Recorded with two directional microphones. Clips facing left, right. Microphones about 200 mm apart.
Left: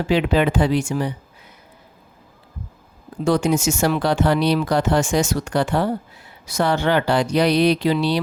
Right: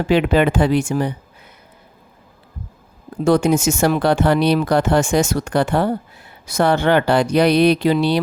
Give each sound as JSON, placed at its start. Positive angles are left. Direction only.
{"t": 0.1, "sound": "speech", "side_deg": -55}
{"t": 3.2, "sound": "speech", "side_deg": -55}